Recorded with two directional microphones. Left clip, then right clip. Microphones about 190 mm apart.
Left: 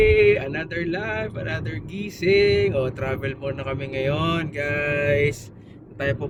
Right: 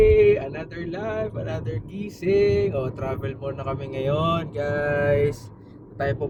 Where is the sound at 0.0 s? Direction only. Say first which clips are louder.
Even; 5° right (ahead or behind).